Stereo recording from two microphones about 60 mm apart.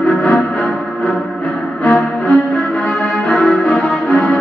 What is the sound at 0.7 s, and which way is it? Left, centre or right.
Music, centre.